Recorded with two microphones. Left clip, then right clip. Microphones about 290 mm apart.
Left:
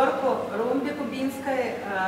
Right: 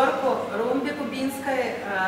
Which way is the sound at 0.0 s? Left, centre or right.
Centre.